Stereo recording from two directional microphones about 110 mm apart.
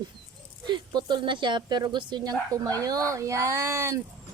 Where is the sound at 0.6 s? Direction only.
40° right (ahead or behind); by 4.0 s 25° right (ahead or behind).